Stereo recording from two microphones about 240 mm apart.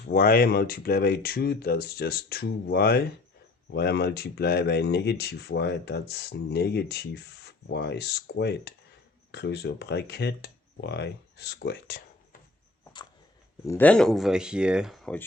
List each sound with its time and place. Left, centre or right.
0.1 s speech: left
13.7 s speech: centre